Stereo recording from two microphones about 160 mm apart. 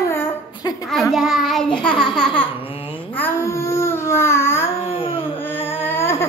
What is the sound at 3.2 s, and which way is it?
Babbling, 15° left (ahead or behind).